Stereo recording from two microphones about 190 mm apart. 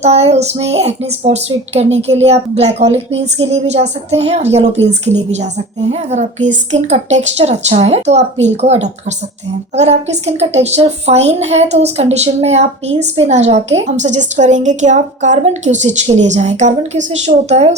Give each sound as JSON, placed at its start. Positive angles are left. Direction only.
{"t": 0.0, "sound": "a woman's voice", "side_deg": -35}